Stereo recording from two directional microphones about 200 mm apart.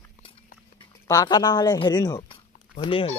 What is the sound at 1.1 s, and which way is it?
Speech, 20° left (ahead or behind).